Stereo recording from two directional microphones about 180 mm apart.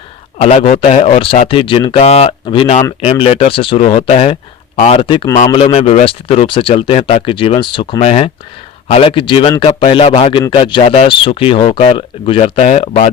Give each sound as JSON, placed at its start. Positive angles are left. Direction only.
{"t": 0.3, "sound": "speech", "side_deg": 35}